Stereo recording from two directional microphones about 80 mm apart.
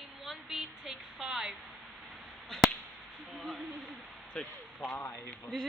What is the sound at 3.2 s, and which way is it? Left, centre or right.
Speech, centre.